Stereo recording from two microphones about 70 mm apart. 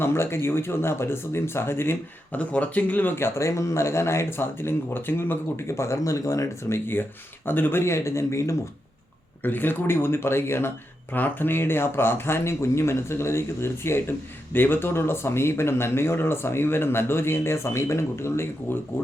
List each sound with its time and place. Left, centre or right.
0.0 s speech: left
2.3 s speech: centre; by 8.5 s left
9.4 s speech: left